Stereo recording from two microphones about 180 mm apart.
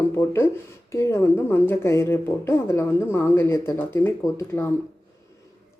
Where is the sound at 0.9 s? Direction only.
15° left (ahead or behind).